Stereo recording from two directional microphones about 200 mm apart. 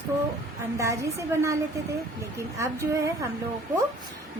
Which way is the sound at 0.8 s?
15° right (ahead or behind).